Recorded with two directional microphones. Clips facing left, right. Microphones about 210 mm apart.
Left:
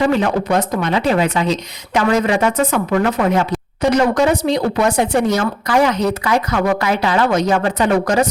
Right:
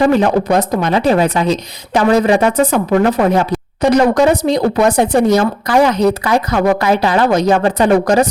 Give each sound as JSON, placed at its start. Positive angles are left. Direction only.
{"t": 0.0, "sound": "a woman's voice", "side_deg": -35}